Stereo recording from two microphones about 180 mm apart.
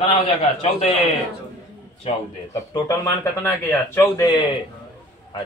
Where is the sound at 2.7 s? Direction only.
15° left (ahead or behind).